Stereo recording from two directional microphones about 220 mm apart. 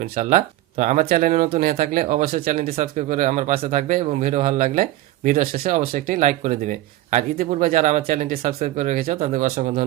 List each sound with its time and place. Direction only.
0.0 s speech: 35° right (ahead or behind)